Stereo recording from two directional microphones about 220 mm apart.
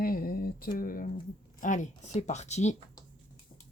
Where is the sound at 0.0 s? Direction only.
40° left (ahead or behind).